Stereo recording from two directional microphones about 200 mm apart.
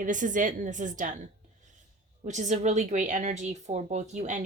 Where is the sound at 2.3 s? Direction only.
35° right (ahead or behind).